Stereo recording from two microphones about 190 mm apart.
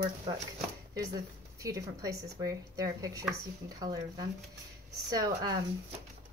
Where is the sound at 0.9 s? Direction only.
20° right (ahead or behind).